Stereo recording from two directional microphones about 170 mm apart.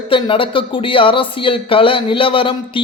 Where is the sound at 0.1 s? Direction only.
30° left (ahead or behind).